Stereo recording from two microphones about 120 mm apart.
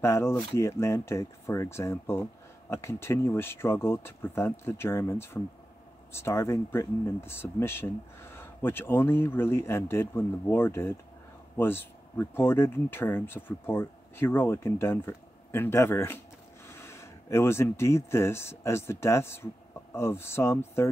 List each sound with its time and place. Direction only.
0.0 s speech: 20° left (ahead or behind)